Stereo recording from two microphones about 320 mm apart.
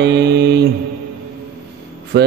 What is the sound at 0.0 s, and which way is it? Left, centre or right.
Mantra, right.